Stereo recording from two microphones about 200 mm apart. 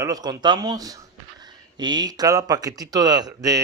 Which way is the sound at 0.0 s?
20° right (ahead or behind).